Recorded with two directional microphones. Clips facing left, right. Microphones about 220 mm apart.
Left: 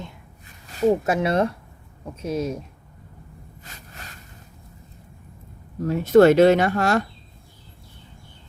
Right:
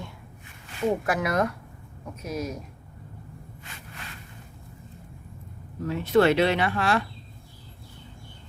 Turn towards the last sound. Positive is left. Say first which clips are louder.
# left 4 dB
turn(degrees=45)  # may be behind; listen again after turning